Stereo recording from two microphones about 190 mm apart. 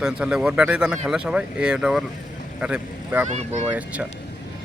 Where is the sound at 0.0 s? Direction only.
5° right (ahead or behind).